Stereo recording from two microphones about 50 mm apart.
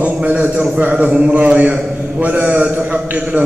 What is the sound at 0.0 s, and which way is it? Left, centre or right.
A man's voice, right.